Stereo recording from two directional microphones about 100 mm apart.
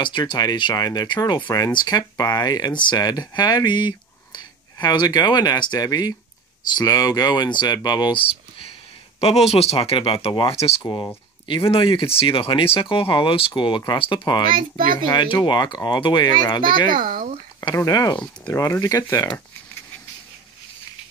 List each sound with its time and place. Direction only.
0.0 s speech: 50° left (ahead or behind)
9.2 s speech: 90° left
10.8 s speech: 50° left (ahead or behind)